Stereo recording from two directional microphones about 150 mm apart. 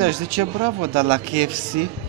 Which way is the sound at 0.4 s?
40° right (ahead or behind).